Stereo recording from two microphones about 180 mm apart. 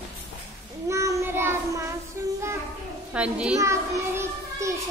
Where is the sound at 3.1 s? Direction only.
5° right (ahead or behind).